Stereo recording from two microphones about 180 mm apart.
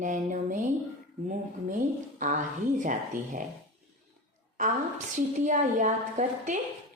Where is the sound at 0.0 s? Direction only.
45° right (ahead or behind).